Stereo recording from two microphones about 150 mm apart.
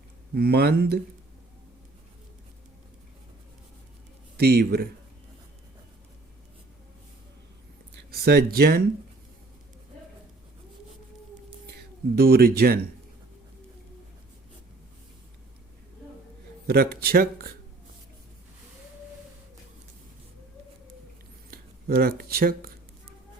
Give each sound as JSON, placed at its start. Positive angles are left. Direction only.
{"t": 0.3, "sound": "speech", "side_deg": -90}
{"t": 4.4, "sound": "speech", "side_deg": -90}
{"t": 8.1, "sound": "speech", "side_deg": -90}
{"t": 12.1, "sound": "speech", "side_deg": -90}
{"t": 16.6, "sound": "speech", "side_deg": -85}
{"t": 21.5, "sound": "a sound", "side_deg": -90}